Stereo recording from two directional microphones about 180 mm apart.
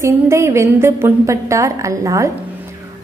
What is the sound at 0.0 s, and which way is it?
A woman's voice, 15° right (ahead or behind).